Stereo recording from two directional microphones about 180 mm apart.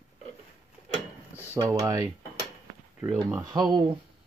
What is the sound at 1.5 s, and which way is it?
Speech, 20° right (ahead or behind).